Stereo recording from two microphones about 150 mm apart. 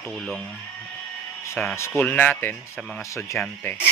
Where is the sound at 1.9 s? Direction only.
10° left (ahead or behind).